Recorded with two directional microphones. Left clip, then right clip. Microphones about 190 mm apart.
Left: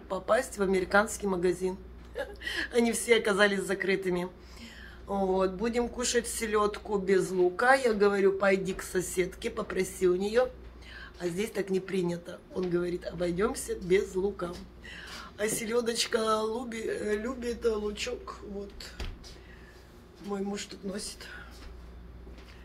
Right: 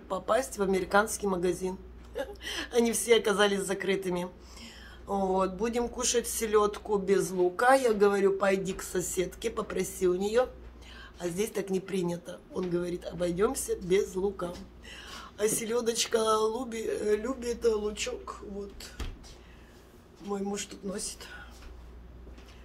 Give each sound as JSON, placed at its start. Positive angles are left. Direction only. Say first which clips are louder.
{"t": 0.1, "sound": "a woman's voice", "louder": "left 1 dB", "side_deg": -15}
{"t": 20.2, "sound": "speech", "louder": "right 1 dB", "side_deg": -15}